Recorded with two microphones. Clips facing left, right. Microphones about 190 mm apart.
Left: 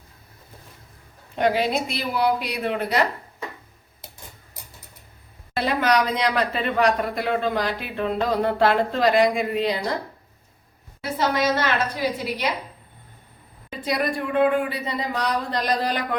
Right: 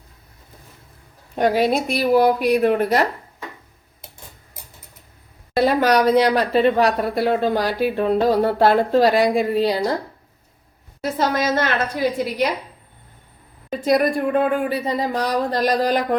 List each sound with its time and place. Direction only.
1.4 s speech: 45° right (ahead or behind)
5.5 s speech: 40° right (ahead or behind)
11.0 s speech: 45° right (ahead or behind)
13.8 s speech: 45° right (ahead or behind)